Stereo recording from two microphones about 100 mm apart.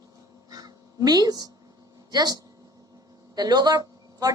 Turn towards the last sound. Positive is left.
turn(degrees=-40)  # may be behind; listen again after turning